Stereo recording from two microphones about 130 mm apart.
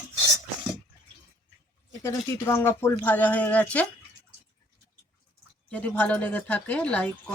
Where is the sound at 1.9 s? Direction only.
20° left (ahead or behind).